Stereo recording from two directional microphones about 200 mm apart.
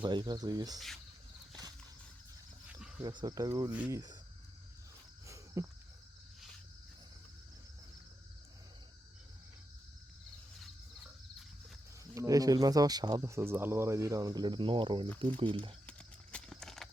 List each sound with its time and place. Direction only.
0.0 s speech: 20° right (ahead or behind)
2.6 s a sound: 5° right (ahead or behind)
3.0 s speech: 20° right (ahead or behind)
5.2 s cricket: 15° right (ahead or behind)
10.6 s a sound: centre (ahead or behind)
12.1 s speech: 15° right (ahead or behind)
15.9 s clip-clop: 5° left (ahead or behind)